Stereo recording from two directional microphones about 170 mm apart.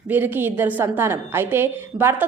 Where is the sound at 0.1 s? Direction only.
10° right (ahead or behind).